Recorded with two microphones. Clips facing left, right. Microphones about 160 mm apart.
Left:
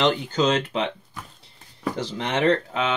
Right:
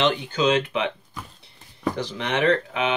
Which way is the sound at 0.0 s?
40° left (ahead or behind).